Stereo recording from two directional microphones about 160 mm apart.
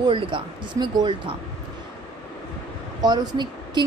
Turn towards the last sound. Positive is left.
turn(degrees=-25)  # may be behind; listen again after turning